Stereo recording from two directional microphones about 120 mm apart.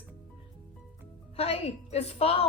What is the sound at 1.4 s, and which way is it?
A woman's voice, 55° left (ahead or behind).